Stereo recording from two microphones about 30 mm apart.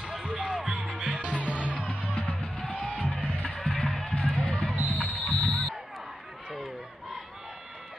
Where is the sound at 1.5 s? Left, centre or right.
Right.